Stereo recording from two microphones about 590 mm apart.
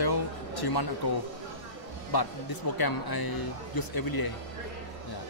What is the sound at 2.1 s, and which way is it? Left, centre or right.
Speech, left.